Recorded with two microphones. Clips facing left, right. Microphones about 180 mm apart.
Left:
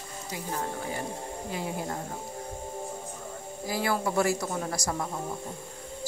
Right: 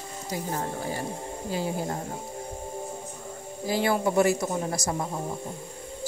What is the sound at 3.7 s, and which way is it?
A man's voice, 25° right (ahead or behind).